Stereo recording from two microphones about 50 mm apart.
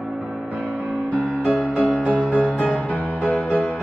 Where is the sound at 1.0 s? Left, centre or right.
Left.